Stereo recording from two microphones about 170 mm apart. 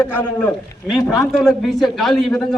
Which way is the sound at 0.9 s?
Centre (ahead or behind).